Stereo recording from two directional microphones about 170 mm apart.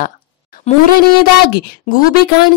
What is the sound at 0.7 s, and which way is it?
Speech, 40° left (ahead or behind).